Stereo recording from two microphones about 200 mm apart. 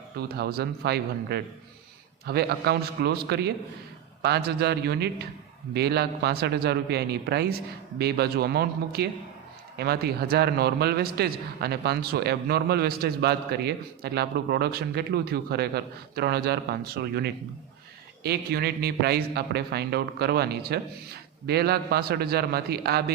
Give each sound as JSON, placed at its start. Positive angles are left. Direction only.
{"t": 0.2, "sound": "a man's voice", "side_deg": -50}